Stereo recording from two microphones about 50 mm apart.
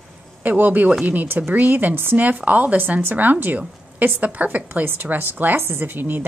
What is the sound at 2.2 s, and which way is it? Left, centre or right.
Speech, right.